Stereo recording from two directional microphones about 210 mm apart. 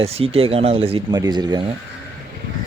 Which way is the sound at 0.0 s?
30° right (ahead or behind).